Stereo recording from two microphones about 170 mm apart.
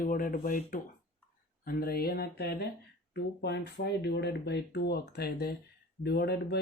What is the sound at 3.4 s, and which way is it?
Speech, 80° left.